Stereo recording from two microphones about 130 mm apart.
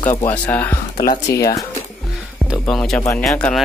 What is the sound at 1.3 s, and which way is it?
Speech, 25° left (ahead or behind).